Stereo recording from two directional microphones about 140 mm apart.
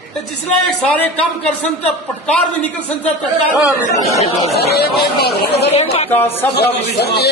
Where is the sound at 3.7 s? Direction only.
25° left (ahead or behind).